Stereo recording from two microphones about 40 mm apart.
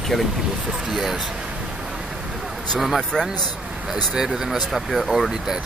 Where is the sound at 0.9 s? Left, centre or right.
Centre.